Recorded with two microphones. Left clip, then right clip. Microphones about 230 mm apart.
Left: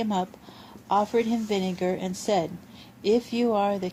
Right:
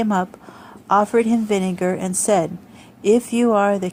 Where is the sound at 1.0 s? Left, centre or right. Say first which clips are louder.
Right 7 dB; right.